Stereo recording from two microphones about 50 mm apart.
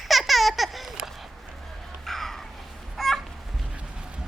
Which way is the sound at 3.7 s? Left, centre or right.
Centre.